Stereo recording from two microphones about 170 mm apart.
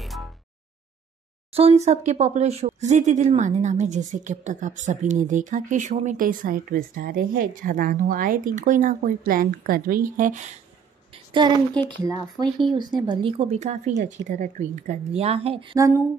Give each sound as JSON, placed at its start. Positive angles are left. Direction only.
{"t": 0.0, "sound": "a sound", "side_deg": 0}
{"t": 1.5, "sound": "a woman's voice", "side_deg": -35}
{"t": 11.3, "sound": "speech", "side_deg": -25}
{"t": 12.7, "sound": "a woman's voice", "side_deg": -25}
{"t": 15.7, "sound": "speech", "side_deg": -20}